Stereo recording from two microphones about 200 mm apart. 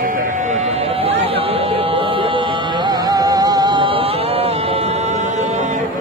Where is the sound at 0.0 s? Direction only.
45° right (ahead or behind).